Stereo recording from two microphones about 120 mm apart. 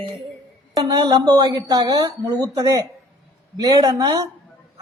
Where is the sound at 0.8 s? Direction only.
35° right (ahead or behind).